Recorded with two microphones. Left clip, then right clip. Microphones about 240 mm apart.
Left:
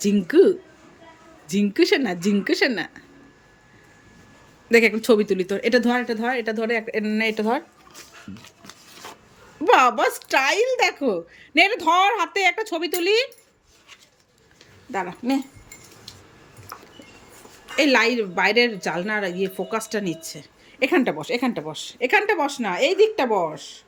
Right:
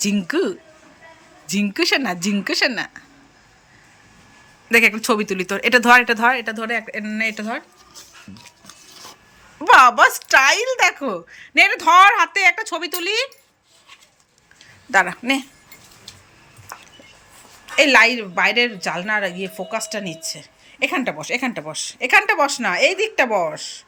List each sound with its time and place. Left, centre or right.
0.0 s a woman's voice: centre
4.7 s a woman's voice: centre
9.6 s a woman's voice: centre
14.9 s speech: right
15.2 s a woman's voice: centre
17.7 s a woman's voice: centre